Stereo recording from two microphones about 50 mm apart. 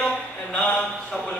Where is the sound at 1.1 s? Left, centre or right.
Left.